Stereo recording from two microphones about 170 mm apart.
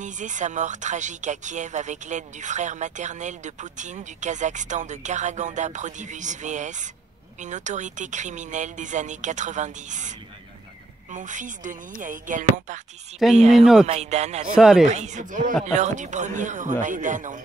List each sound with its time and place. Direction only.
0.0 s speech: 45° right (ahead or behind)
14.5 s speech: 5° right (ahead or behind)
14.9 s speech: 45° right (ahead or behind)